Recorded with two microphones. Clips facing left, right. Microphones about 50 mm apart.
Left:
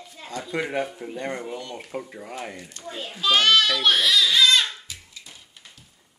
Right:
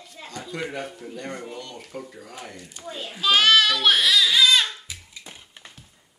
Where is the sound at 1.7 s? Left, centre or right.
Left.